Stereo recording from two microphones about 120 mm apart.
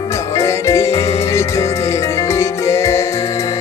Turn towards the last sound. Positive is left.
turn(degrees=25)  # may be behind; listen again after turning